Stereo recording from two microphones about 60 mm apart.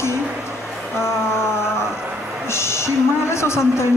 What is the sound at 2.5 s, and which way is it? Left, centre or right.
Speech, left.